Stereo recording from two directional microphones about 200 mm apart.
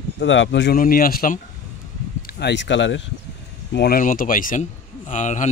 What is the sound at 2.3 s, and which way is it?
Speech, 60° left (ahead or behind).